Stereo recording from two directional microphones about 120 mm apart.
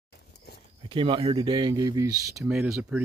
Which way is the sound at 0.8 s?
50° right (ahead or behind).